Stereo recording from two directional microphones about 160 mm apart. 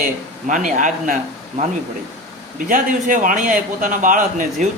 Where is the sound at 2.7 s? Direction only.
55° right (ahead or behind).